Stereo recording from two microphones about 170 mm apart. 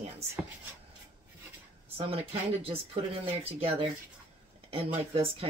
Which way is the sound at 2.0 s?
35° right (ahead or behind).